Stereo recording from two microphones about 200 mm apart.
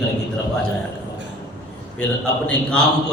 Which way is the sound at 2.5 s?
5° left (ahead or behind).